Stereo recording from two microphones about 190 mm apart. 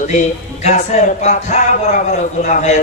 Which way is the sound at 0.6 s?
40° left (ahead or behind).